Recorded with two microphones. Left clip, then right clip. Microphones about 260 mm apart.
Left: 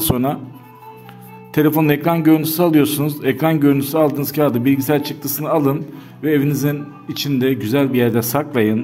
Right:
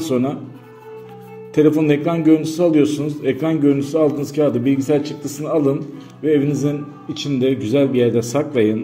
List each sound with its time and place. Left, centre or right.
0.0 s speech: left
1.5 s a man's voice: left